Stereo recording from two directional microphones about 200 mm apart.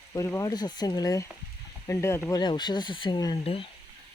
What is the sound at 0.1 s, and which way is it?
Speech, 15° left (ahead or behind).